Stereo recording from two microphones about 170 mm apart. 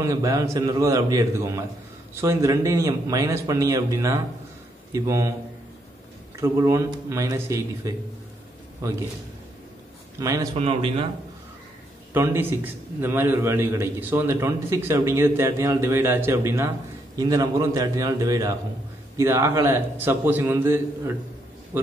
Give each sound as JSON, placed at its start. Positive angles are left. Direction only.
{"t": 0.0, "sound": "a man's voice", "side_deg": -20}
{"t": 6.3, "sound": "a man's voice", "side_deg": -15}
{"t": 10.1, "sound": "speech", "side_deg": -20}
{"t": 10.5, "sound": "a man's voice", "side_deg": -35}
{"t": 12.1, "sound": "a man's voice", "side_deg": -15}